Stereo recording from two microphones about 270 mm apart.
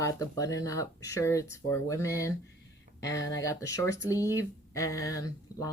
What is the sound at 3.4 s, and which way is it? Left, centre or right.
Speech, centre.